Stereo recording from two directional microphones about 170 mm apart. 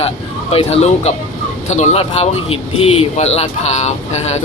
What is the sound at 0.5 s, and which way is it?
Speech, 35° left (ahead or behind).